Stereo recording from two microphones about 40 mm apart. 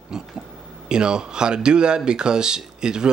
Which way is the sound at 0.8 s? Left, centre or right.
Right.